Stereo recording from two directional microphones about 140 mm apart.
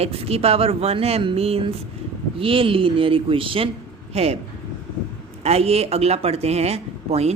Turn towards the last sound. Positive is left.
turn(degrees=-50)  # may be behind; listen again after turning